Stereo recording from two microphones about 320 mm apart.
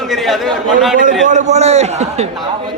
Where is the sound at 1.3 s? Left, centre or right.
Right.